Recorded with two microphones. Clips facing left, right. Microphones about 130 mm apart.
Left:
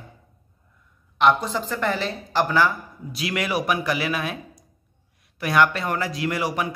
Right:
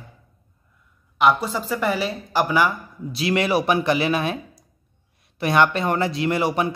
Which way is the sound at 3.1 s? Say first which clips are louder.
Right 5 dB; 30° right (ahead or behind).